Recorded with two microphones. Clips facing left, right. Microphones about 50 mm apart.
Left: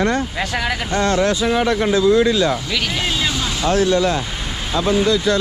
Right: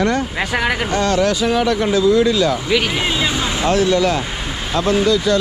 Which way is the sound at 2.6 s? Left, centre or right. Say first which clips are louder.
Right 4 dB; centre.